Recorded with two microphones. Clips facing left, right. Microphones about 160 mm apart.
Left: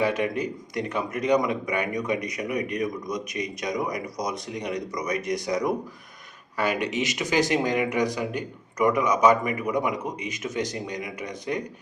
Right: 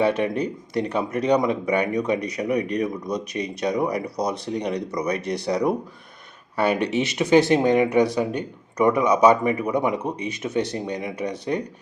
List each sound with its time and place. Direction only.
0.2 s speech: 30° right (ahead or behind)
7.3 s speech: 30° right (ahead or behind)